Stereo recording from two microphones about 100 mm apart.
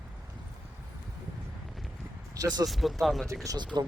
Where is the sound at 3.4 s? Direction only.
45° right (ahead or behind).